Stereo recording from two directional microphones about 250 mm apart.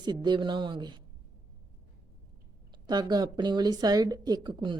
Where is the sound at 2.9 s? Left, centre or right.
Centre.